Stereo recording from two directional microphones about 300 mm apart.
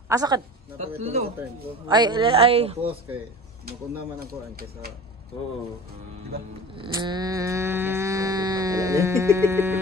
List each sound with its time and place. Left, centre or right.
0.1 s speech: centre
4.3 s speech: right
6.3 s speech: right
6.7 s livestock: centre